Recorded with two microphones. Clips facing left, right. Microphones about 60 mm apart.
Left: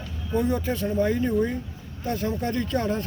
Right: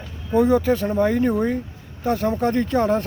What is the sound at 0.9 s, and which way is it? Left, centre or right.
Speech, right.